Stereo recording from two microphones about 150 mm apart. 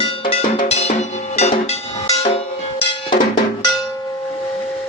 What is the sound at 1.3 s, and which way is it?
Music, 45° left (ahead or behind).